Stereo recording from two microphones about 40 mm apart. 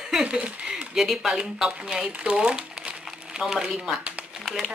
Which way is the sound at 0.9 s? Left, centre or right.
Centre.